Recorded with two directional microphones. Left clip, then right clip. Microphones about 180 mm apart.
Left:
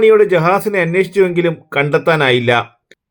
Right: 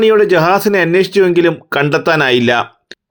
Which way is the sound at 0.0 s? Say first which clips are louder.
Even; 30° right (ahead or behind).